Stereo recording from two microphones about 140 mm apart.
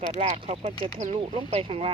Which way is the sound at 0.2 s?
45° right (ahead or behind).